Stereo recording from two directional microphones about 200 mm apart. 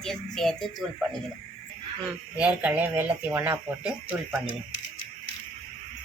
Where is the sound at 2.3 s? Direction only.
5° right (ahead or behind).